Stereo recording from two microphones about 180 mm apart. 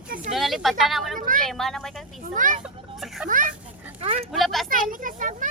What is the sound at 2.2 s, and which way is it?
Speech, 50° right (ahead or behind).